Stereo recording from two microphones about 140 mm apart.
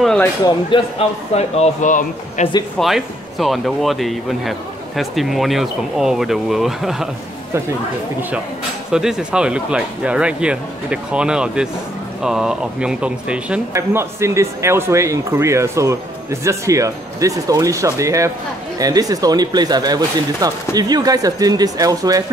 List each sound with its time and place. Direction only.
0.4 s a man's voice: 35° left (ahead or behind)
1.3 s speech: 55° left (ahead or behind)
2.8 s speech: centre (ahead or behind)
8.9 s speech: 5° right (ahead or behind)
13.7 s speech: 20° right (ahead or behind)